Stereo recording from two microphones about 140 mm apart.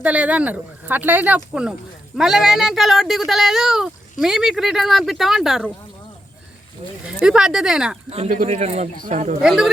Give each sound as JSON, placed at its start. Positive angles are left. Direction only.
{"t": 0.0, "sound": "speech", "side_deg": -10}
{"t": 7.0, "sound": "speech", "side_deg": -5}
{"t": 8.3, "sound": "speech", "side_deg": -55}
{"t": 9.0, "sound": "speech", "side_deg": -60}
{"t": 9.4, "sound": "speech", "side_deg": -5}